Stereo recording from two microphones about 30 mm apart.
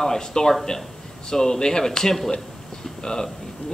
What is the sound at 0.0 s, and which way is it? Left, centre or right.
A man's voice, left.